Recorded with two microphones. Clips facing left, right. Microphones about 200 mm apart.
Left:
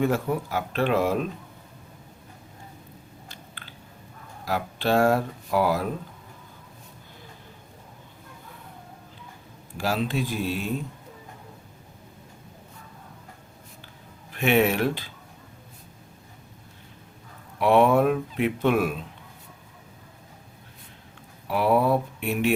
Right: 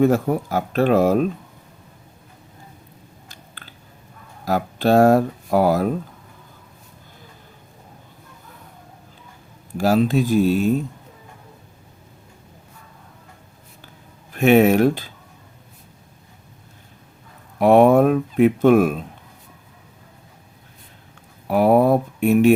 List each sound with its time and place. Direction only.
0.0 s speech: 45° right (ahead or behind)
3.2 s chewing: 45° right (ahead or behind)
4.4 s speech: 45° right (ahead or behind)
9.7 s speech: 45° right (ahead or behind)
14.3 s speech: 45° right (ahead or behind)
17.6 s speech: 45° right (ahead or behind)
21.4 s speech: 45° right (ahead or behind)